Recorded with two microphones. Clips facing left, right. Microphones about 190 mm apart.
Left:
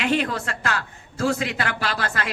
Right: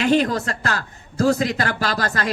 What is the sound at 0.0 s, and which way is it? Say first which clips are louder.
A woman's voice: right 5 dB; 40° right (ahead or behind).